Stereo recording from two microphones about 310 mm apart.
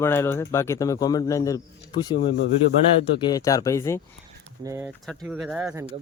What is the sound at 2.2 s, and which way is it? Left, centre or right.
Speech, left.